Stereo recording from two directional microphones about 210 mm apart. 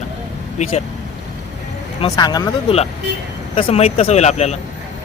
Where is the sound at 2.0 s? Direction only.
20° left (ahead or behind).